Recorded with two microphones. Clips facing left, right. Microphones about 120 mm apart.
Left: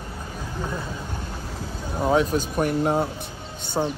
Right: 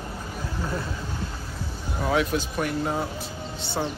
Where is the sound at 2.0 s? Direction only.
35° left (ahead or behind).